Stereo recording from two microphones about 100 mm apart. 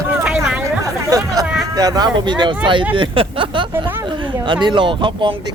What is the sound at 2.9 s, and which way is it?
Speech, 60° right (ahead or behind).